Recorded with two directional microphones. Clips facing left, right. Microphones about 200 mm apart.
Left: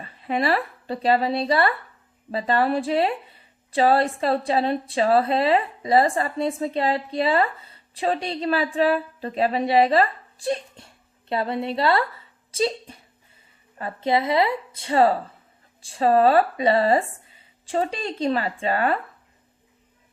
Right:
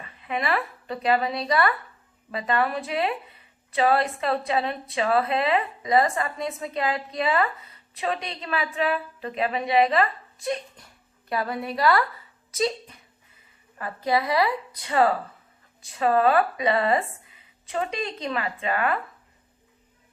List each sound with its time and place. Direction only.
0.0 s a woman's voice: 35° left (ahead or behind)